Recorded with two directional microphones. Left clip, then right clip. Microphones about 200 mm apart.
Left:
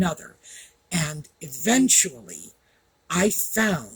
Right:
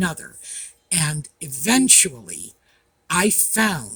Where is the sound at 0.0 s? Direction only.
40° right (ahead or behind).